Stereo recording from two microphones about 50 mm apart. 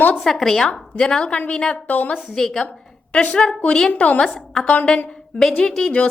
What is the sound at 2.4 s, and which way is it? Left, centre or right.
Speech, centre.